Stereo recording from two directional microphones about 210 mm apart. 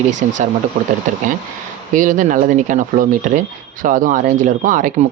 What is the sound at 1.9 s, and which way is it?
Speech, 40° right (ahead or behind).